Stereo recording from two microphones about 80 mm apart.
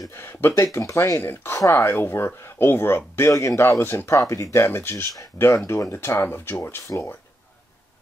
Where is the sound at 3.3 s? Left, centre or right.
Left.